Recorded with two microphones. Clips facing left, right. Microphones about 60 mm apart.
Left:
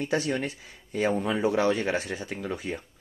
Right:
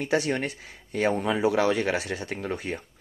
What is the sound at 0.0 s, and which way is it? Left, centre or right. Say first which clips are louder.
Speech: right 2 dB; right.